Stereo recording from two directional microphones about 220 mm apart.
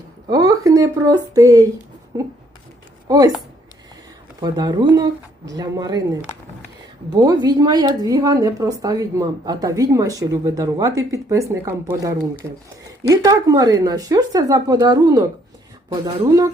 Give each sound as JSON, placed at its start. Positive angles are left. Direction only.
{"t": 0.3, "sound": "a woman's voice", "side_deg": -15}
{"t": 4.4, "sound": "a woman's voice", "side_deg": -20}
{"t": 7.1, "sound": "a woman's voice", "side_deg": -15}